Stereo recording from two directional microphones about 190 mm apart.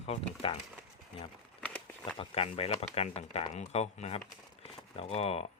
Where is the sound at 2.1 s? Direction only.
30° left (ahead or behind).